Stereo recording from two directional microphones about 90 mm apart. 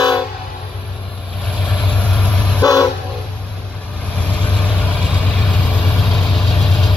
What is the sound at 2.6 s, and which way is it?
Train, 40° left (ahead or behind).